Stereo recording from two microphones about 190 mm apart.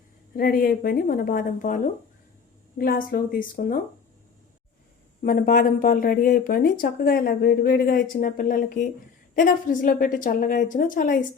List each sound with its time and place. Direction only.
0.3 s speech: 50° left (ahead or behind)
5.2 s speech: 50° left (ahead or behind)